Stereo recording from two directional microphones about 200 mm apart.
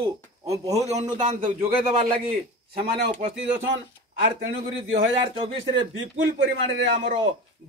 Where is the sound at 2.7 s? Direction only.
50° right (ahead or behind).